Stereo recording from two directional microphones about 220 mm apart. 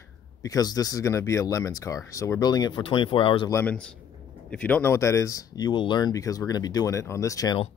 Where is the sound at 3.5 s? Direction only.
5° left (ahead or behind).